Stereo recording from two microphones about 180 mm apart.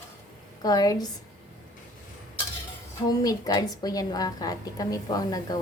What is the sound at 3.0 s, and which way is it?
A woman's voice, 20° left (ahead or behind).